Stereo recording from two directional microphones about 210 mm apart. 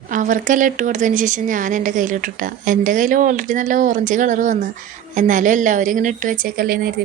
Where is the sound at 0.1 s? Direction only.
40° right (ahead or behind).